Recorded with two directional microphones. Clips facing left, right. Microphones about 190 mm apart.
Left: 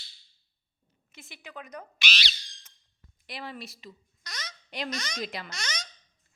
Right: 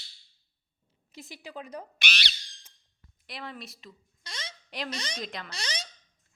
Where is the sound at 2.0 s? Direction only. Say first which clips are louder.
Left 1 dB; 55° right (ahead or behind).